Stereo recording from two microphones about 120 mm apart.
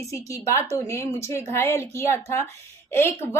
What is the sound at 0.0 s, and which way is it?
A woman's voice, 25° left (ahead or behind).